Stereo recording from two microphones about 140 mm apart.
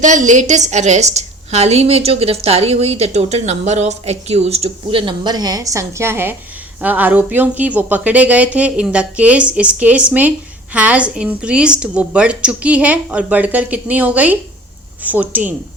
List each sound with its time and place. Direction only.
0.0 s a woman's voice: 60° right (ahead or behind); by 15.5 s 10° right (ahead or behind)